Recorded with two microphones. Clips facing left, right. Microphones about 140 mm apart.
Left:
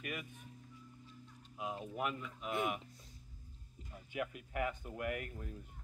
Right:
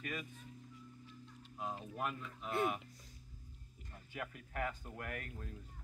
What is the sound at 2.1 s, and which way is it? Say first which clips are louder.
Speech: even; 15° left (ahead or behind).